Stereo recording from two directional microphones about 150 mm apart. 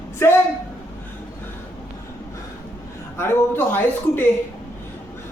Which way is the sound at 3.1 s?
15° left (ahead or behind).